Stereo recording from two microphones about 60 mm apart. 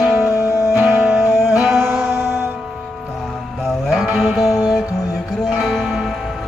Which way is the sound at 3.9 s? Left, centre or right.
Centre.